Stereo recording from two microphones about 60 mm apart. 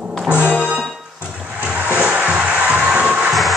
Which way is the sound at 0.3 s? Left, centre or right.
Right.